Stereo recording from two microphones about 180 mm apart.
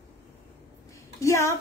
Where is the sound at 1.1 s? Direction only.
15° left (ahead or behind).